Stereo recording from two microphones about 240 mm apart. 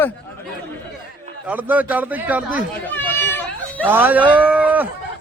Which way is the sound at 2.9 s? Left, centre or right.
Centre.